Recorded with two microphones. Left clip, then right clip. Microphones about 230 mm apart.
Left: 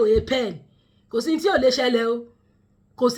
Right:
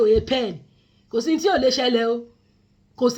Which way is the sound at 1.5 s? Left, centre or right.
Centre.